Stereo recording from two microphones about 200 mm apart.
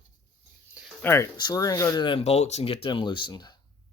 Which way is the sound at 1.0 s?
15° left (ahead or behind).